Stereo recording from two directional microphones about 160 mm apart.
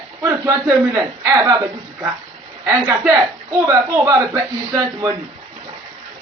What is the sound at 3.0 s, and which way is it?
Speech, 15° right (ahead or behind).